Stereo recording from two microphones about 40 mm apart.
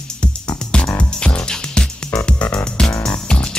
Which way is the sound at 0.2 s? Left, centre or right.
Left.